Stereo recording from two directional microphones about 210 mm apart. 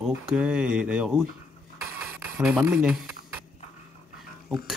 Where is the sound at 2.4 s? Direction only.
5° right (ahead or behind).